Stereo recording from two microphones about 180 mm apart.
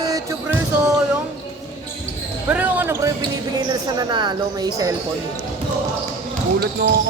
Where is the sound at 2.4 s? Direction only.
10° right (ahead or behind).